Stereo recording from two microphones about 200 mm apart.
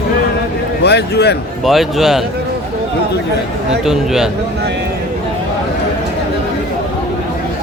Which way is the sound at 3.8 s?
Centre (ahead or behind).